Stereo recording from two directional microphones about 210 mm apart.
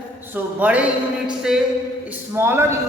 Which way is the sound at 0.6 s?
5° right (ahead or behind).